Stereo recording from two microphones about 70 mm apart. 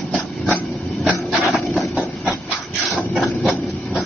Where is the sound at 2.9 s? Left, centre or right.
Centre.